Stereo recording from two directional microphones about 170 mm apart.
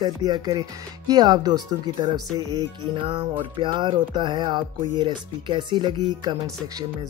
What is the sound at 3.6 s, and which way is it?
Speech, 25° right (ahead or behind).